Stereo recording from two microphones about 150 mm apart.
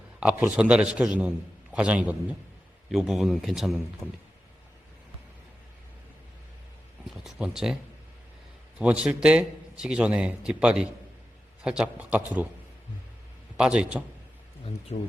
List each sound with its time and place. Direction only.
0.2 s a man's voice: 10° right (ahead or behind)
7.3 s speech: 5° right (ahead or behind)
8.8 s a man's voice: 10° right (ahead or behind)
13.6 s speech: 5° right (ahead or behind)
14.9 s speech: 50° left (ahead or behind)